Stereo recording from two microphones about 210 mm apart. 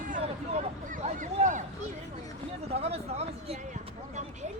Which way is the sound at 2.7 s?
30° right (ahead or behind).